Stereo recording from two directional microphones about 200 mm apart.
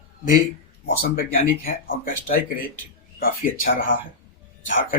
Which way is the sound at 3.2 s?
45° left (ahead or behind).